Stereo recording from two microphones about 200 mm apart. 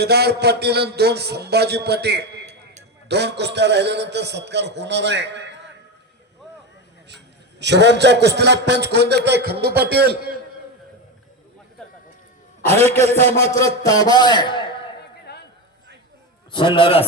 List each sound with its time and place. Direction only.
0.0 s a man's voice: 55° right (ahead or behind)
7.6 s a man's voice: 60° right (ahead or behind)
12.6 s speech: 10° left (ahead or behind)
15.3 s a sound: 55° left (ahead or behind)
16.5 s a man's voice: 25° left (ahead or behind)